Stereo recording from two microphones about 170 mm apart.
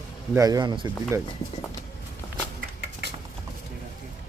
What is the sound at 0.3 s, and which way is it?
Speech, 20° right (ahead or behind).